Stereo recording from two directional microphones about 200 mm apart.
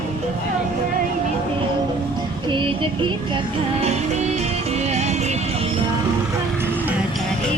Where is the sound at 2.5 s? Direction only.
25° right (ahead or behind).